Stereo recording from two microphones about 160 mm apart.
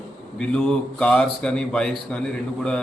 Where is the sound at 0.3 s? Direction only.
5° left (ahead or behind).